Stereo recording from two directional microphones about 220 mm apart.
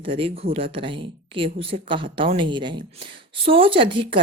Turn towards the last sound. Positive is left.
turn(degrees=-25)  # may be behind; listen again after turning